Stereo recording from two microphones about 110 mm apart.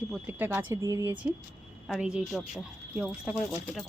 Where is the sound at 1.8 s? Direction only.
5° right (ahead or behind).